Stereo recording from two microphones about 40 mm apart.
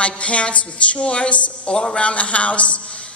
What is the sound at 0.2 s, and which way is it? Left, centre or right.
A woman's voice, left.